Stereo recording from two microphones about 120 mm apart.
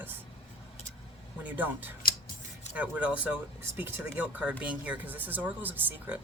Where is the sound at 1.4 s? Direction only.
15° right (ahead or behind).